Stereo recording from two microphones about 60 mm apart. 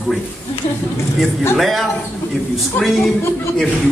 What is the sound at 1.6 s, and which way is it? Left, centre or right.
Speech, centre.